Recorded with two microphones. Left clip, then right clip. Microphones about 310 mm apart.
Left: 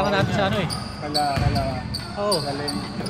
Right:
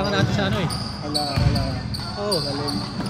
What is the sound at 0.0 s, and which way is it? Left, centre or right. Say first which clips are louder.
Basketball bounce: left 2 dB; left.